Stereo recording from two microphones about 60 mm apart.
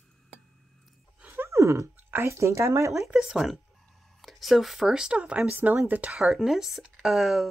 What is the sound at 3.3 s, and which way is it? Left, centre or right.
Speech, centre.